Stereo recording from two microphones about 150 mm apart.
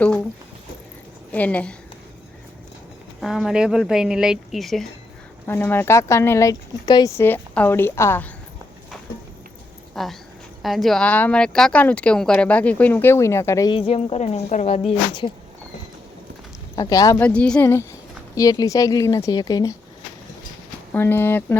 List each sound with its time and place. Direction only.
0.0 s speech: 10° left (ahead or behind)
1.3 s speech: 10° left (ahead or behind)
3.2 s a woman's voice: centre (ahead or behind)
5.5 s speech: 15° left (ahead or behind)
7.3 s speech: 15° left (ahead or behind)
9.9 s speech: centre (ahead or behind); by 13.7 s 20° left (ahead or behind)
13.7 s speech: 40° left (ahead or behind)
16.7 s speech: 25° left (ahead or behind)
17.2 s speech: 10° left (ahead or behind); by 19.7 s 25° left (ahead or behind)
20.9 s speech: 15° left (ahead or behind)